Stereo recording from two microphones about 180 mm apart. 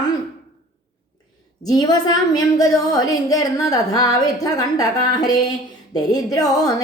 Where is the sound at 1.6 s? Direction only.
20° left (ahead or behind).